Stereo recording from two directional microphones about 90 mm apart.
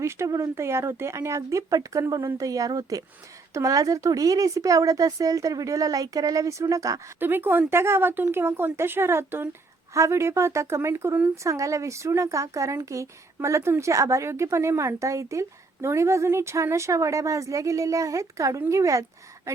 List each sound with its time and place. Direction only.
0.0 s speech: 30° right (ahead or behind)
7.2 s speech: 25° right (ahead or behind)